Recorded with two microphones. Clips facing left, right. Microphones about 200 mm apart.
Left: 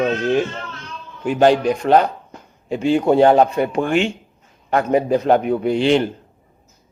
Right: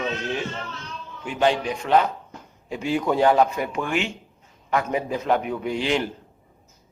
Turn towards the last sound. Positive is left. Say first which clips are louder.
# left 8 dB
turn(degrees=30)  # may be behind; listen again after turning